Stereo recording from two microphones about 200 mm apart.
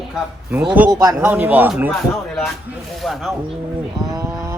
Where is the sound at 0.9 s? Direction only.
20° right (ahead or behind).